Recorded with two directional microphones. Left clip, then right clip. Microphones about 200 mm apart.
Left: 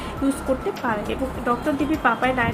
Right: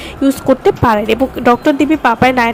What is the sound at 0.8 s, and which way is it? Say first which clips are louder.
Speech: right 13 dB; 50° right (ahead or behind).